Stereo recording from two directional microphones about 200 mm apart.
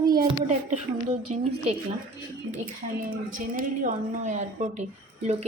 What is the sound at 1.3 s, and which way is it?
Speech, 35° right (ahead or behind).